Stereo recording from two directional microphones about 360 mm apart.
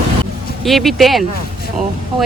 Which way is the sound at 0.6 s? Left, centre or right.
Centre.